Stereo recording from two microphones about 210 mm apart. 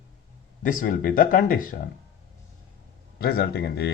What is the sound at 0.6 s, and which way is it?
Speech, 40° left (ahead or behind).